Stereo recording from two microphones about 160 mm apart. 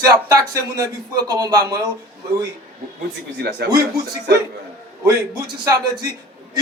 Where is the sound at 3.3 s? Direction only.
90° right.